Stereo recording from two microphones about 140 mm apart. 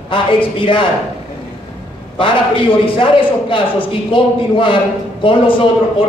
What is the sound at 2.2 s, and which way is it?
A man's voice, 40° left (ahead or behind).